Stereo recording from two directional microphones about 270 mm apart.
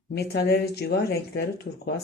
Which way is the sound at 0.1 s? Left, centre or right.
Left.